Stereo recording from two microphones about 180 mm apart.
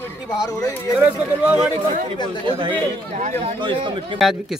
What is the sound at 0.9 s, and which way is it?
Speech, 10° right (ahead or behind).